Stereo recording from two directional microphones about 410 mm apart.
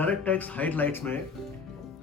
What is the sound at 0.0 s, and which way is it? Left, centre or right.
Speech, centre.